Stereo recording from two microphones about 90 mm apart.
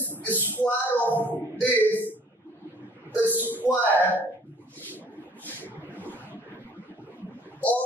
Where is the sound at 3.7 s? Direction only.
15° left (ahead or behind).